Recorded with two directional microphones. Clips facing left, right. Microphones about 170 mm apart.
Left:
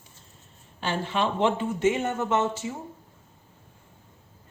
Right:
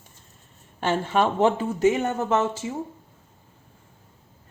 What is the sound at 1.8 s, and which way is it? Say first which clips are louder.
Speech: right 4 dB; 35° right (ahead or behind).